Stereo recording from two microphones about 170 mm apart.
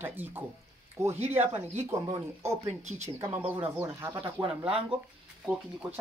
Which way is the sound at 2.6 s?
40° right (ahead or behind).